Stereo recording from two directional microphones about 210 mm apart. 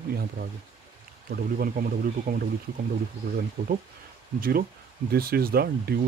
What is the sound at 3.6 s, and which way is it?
Speech, 35° right (ahead or behind).